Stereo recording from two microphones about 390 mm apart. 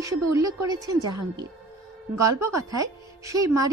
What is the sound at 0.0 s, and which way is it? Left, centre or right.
A woman's voice, centre.